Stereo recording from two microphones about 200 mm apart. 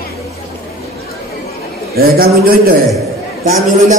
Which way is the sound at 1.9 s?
50° right (ahead or behind).